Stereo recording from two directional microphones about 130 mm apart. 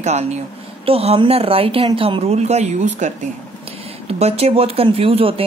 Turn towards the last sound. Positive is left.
turn(degrees=-45)  # may be behind; listen again after turning